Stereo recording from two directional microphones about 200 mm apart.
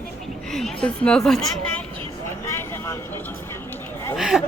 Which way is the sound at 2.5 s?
15° left (ahead or behind).